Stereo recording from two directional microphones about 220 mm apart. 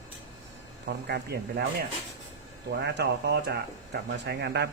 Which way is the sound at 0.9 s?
50° right (ahead or behind).